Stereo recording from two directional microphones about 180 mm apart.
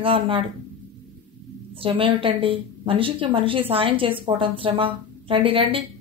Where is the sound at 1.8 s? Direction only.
30° right (ahead or behind).